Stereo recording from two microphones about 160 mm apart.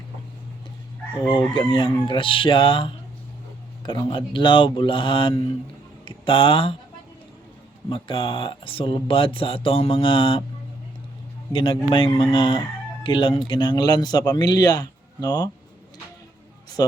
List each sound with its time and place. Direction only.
1.5 s speech: 30° left (ahead or behind)
7.9 s speech: 30° left (ahead or behind)
11.5 s a man's voice: 35° left (ahead or behind)